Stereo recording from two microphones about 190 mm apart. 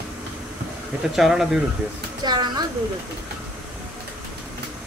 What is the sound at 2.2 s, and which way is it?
Speech, 20° right (ahead or behind).